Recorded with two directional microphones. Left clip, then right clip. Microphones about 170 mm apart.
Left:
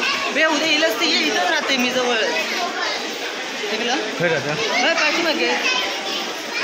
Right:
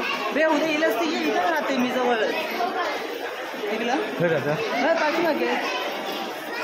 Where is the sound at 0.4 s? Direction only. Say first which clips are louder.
Left 3 dB; 45° right (ahead or behind).